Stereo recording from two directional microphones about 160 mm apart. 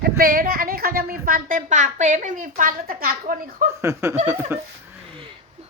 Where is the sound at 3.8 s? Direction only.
15° right (ahead or behind).